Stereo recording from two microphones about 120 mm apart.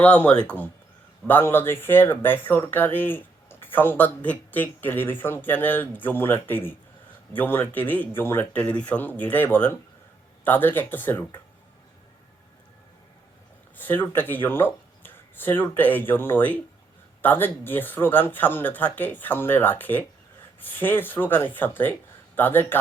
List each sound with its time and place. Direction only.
0.0 s speech: 10° left (ahead or behind)
13.7 s speech: 15° left (ahead or behind)